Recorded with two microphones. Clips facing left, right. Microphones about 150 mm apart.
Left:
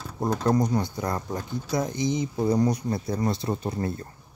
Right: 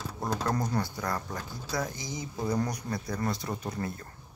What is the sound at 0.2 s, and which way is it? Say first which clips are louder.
Speech: left 7 dB; 20° left (ahead or behind).